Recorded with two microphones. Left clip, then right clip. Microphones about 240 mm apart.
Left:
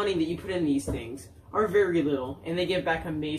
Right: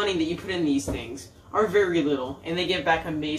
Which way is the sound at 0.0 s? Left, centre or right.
Centre.